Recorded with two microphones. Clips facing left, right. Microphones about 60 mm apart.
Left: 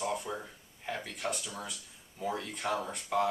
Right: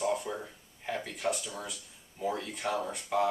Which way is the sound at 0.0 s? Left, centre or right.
Centre.